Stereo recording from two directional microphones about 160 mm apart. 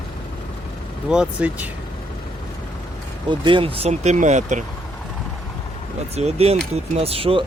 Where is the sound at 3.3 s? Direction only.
30° right (ahead or behind); by 4.6 s 50° right (ahead or behind).